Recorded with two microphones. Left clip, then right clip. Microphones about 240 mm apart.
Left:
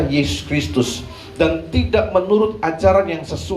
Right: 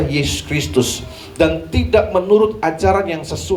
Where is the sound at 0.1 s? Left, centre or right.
Right.